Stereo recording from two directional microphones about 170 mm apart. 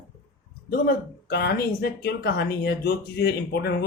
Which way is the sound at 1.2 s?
70° left (ahead or behind).